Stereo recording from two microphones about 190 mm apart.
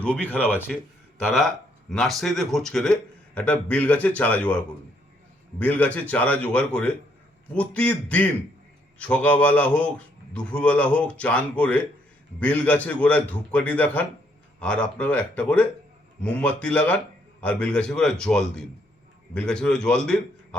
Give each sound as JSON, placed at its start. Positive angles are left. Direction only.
{"t": 0.0, "sound": "a man's voice", "side_deg": 5}
{"t": 9.0, "sound": "a man's voice", "side_deg": 5}